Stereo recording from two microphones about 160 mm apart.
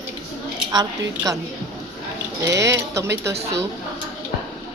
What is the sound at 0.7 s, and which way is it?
Speech, 20° right (ahead or behind).